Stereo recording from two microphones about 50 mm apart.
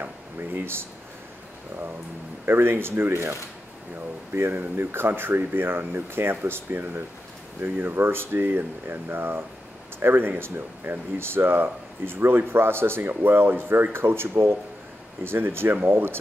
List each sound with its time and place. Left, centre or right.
0.0 s speech: right
2.4 s speech: right